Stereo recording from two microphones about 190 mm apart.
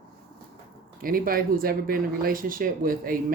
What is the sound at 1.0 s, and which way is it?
Speech, 50° right (ahead or behind).